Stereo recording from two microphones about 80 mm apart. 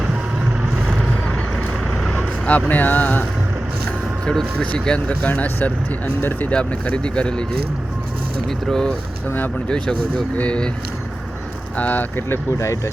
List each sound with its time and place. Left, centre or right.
0.9 s vehicle: centre
4.3 s speech: centre
6.5 s speech: centre
8.4 s speech: centre
11.8 s speech: left
12.5 s speech: left